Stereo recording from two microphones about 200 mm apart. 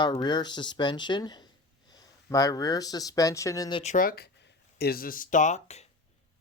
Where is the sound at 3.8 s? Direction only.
40° left (ahead or behind).